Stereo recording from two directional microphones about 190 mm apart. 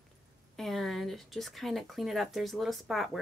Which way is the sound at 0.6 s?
Centre (ahead or behind).